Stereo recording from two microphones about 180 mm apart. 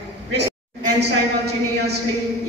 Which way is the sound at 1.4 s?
65° right (ahead or behind).